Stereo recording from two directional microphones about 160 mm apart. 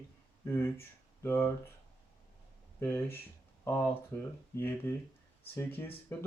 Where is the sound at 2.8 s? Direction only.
15° left (ahead or behind).